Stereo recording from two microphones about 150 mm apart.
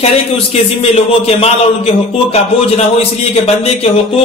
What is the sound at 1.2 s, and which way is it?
A man's voice, 40° left (ahead or behind).